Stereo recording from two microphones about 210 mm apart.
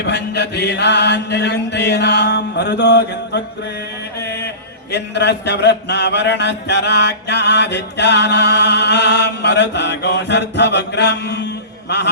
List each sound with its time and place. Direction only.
0.0 s a man's voice: 55° left (ahead or behind)
4.9 s a man's voice: 55° left (ahead or behind)
11.9 s a sound: 55° left (ahead or behind)